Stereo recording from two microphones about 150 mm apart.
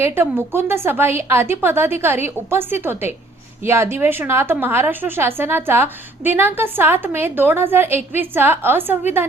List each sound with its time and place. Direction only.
0.0 s a woman's voice: 15° right (ahead or behind)